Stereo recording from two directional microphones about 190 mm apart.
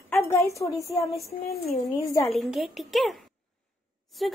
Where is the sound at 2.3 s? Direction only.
Centre (ahead or behind).